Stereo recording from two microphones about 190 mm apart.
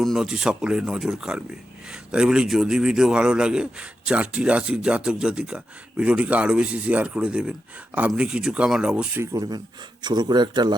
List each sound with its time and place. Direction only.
0.0 s a man's voice: centre (ahead or behind)
9.2 s speech: 20° right (ahead or behind)